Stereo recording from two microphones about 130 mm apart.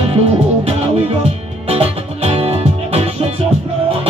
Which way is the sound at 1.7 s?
50° right (ahead or behind).